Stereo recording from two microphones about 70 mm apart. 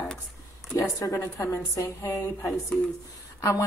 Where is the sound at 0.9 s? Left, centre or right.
Left.